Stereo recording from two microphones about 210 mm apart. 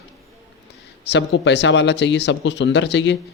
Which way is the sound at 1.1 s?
55° left (ahead or behind).